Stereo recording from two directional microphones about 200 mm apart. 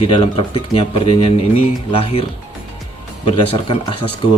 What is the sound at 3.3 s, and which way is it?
Speech, 25° left (ahead or behind).